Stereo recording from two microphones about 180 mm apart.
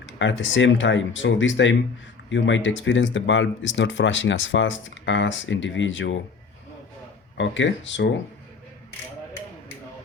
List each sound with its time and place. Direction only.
0.0 s speech: 90° left
7.3 s speech: 90° left